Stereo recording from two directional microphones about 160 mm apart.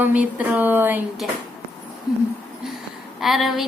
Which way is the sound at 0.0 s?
10° right (ahead or behind).